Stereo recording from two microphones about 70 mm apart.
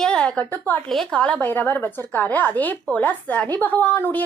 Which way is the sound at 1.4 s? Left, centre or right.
Left.